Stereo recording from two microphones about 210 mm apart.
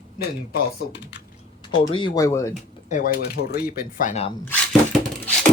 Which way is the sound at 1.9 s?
20° left (ahead or behind).